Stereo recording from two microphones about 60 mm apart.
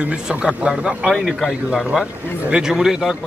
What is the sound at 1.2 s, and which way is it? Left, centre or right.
Speech, centre.